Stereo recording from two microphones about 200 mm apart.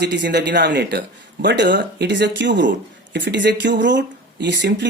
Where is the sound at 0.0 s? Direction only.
60° right (ahead or behind).